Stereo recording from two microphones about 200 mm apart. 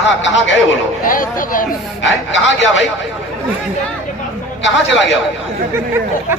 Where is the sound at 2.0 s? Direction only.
65° left (ahead or behind).